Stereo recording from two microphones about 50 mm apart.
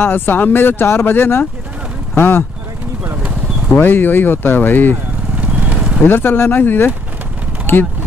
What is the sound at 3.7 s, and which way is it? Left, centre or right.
Speech, left.